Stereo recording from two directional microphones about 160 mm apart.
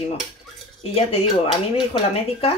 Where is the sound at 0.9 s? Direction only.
35° left (ahead or behind).